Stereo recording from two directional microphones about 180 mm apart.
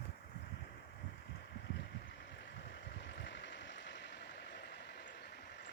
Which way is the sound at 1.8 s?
80° left.